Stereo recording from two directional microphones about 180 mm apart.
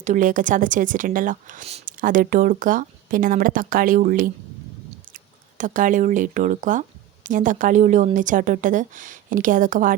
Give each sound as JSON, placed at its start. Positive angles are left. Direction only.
{"t": 0.0, "sound": "speech", "side_deg": -45}